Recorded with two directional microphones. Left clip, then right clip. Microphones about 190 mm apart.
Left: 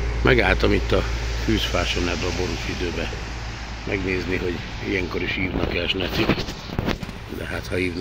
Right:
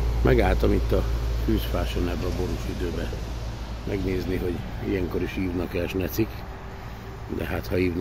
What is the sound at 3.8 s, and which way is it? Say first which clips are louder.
Speech: left 4 dB; 5° right (ahead or behind).